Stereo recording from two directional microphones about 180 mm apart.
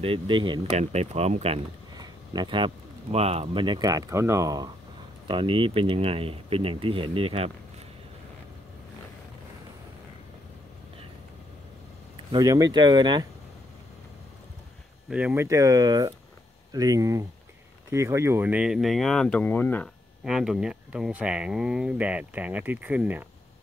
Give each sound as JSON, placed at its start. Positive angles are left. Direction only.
{"t": 0.0, "sound": "speech", "side_deg": -30}
{"t": 2.0, "sound": "speech", "side_deg": -25}
{"t": 12.3, "sound": "speech", "side_deg": -20}
{"t": 15.0, "sound": "speech", "side_deg": -5}
{"t": 20.2, "sound": "speech", "side_deg": 0}